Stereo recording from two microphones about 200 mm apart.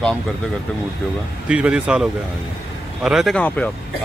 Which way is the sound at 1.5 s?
5° right (ahead or behind).